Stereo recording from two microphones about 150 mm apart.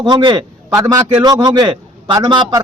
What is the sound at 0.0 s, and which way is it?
A man's voice, 30° right (ahead or behind).